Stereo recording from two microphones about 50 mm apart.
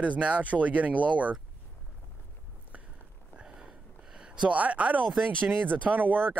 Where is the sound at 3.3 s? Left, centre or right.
Right.